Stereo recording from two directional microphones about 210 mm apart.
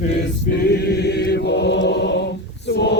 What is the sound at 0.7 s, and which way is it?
Choir, 50° left (ahead or behind).